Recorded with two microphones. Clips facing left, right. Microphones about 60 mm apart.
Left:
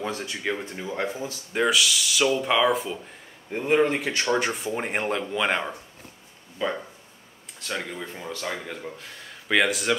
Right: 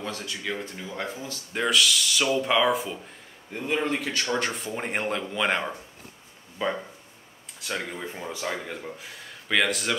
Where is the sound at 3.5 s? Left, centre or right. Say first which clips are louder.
Left 5 dB; left.